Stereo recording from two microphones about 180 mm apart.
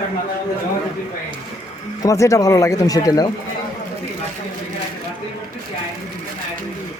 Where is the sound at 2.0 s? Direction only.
15° left (ahead or behind).